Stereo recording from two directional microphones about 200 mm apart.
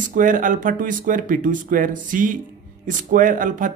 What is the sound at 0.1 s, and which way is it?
Speech, 40° right (ahead or behind).